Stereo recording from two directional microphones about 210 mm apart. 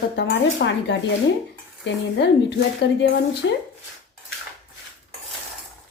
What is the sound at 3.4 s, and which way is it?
Speech, 55° left (ahead or behind).